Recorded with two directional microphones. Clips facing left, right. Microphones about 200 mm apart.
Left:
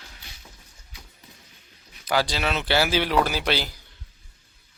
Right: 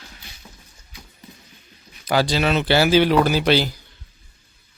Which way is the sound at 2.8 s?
5° left (ahead or behind).